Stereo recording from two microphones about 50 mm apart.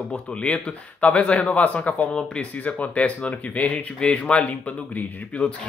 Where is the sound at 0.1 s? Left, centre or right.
Left.